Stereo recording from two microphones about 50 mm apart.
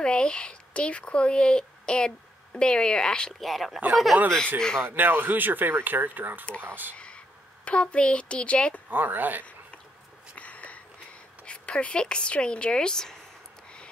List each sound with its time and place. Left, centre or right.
0.0 s speech: centre
3.3 s speech: centre
4.1 s speech: right
4.6 s a man's voice: centre
4.8 s speech: right
7.6 s a woman's voice: left
8.9 s speech: right
10.3 s a sound: left
11.4 s speech: left